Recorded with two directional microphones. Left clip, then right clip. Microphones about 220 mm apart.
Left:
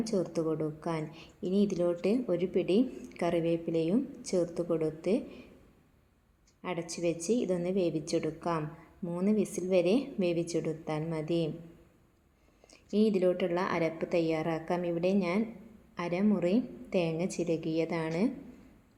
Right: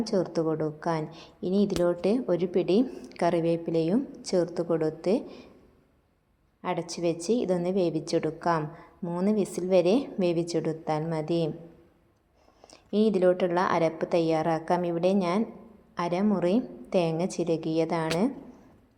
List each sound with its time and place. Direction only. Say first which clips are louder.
0.0 s a woman's voice: right 5 dB; 15° right (ahead or behind)
6.6 s a woman's voice: right 5 dB; 15° right (ahead or behind)
12.6 s a woman's voice: right 4 dB; 15° right (ahead or behind)